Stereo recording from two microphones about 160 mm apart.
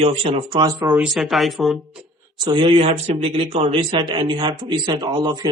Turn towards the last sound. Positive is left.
turn(degrees=-25)  # may be behind; listen again after turning